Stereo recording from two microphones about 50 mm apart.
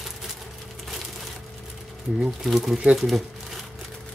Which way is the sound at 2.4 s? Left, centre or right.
Centre.